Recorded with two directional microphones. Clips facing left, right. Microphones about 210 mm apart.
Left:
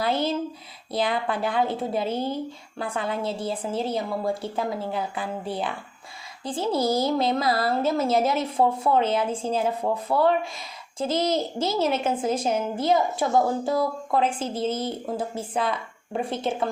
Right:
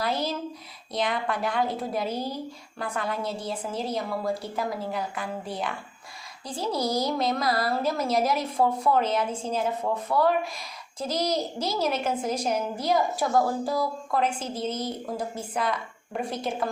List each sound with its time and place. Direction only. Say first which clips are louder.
0.0 s a woman's voice: left 4 dB; 25° left (ahead or behind)